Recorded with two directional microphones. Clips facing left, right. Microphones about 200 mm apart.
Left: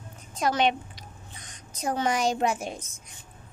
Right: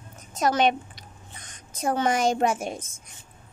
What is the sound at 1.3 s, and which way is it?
A woman's voice, 50° right (ahead or behind).